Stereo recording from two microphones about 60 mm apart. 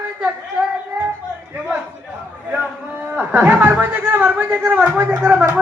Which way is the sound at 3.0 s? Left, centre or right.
Right.